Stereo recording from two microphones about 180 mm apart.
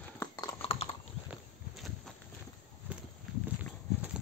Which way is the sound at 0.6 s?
30° left (ahead or behind).